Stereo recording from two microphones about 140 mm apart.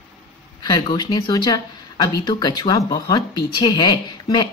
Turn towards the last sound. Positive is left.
turn(degrees=30)  # may be behind; listen again after turning